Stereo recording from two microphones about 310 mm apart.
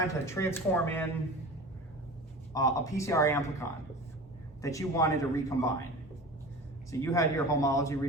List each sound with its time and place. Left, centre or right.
0.3 s a man's voice: centre
2.5 s a man's voice: centre
6.9 s a man's voice: centre